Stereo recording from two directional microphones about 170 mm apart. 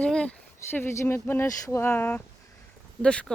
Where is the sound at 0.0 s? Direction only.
5° left (ahead or behind).